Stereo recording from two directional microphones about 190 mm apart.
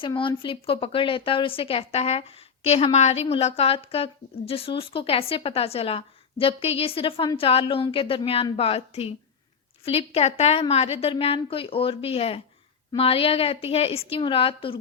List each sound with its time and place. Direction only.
0.0 s a woman's voice: 25° left (ahead or behind)